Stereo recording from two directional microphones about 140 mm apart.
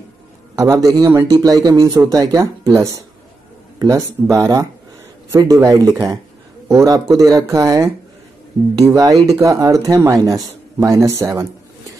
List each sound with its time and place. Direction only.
0.6 s speech: 25° right (ahead or behind)